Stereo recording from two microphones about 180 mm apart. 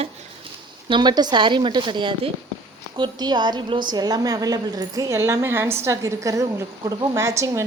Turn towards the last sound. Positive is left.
turn(degrees=-15)  # may be behind; listen again after turning